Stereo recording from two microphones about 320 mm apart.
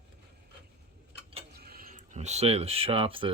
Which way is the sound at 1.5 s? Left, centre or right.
Right.